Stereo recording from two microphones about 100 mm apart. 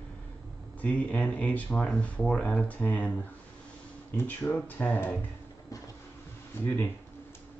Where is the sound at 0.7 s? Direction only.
15° left (ahead or behind).